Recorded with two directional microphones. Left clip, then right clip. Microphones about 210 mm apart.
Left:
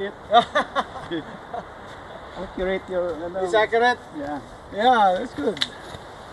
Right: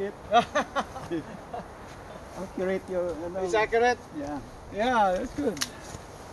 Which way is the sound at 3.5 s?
50° left (ahead or behind).